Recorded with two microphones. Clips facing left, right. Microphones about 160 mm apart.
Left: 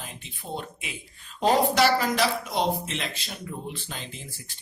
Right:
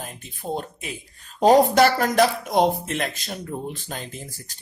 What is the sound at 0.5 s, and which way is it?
Speech, 40° right (ahead or behind).